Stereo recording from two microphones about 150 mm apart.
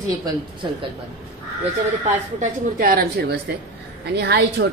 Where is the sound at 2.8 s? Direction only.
80° right.